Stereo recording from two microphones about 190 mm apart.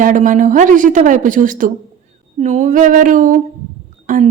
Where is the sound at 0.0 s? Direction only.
45° right (ahead or behind).